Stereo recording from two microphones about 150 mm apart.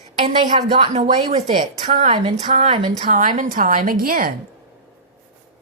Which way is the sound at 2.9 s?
60° right (ahead or behind).